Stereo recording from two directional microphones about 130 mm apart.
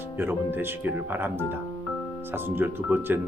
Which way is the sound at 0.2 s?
15° right (ahead or behind).